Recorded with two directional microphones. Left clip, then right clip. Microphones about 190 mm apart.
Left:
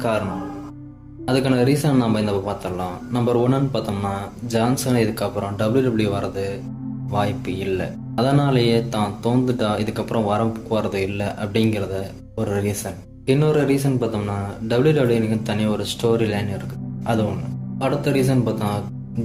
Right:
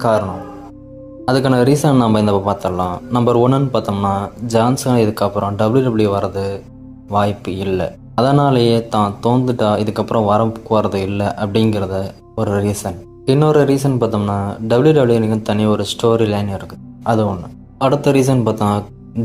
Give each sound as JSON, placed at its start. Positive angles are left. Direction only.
{"t": 1.2, "sound": "speech", "side_deg": -35}